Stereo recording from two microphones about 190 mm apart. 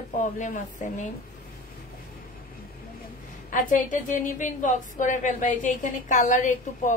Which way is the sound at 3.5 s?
45° left (ahead or behind).